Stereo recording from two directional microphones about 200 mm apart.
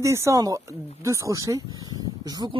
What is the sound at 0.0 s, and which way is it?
Speech, 15° right (ahead or behind).